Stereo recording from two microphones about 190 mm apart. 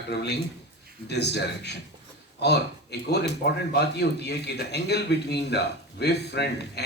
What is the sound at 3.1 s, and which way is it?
Speech, 60° left (ahead or behind).